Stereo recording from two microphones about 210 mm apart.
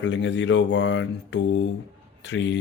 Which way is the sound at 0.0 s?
60° left (ahead or behind).